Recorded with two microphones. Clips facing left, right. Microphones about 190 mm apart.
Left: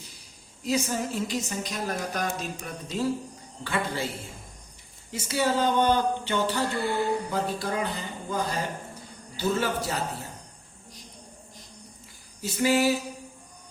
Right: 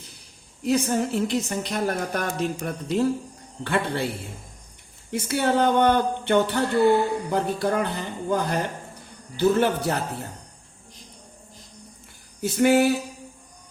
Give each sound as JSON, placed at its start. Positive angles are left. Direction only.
{"t": 0.6, "sound": "a woman's voice", "side_deg": -60}
{"t": 5.1, "sound": "a woman's voice", "side_deg": -60}
{"t": 12.4, "sound": "a woman's voice", "side_deg": -60}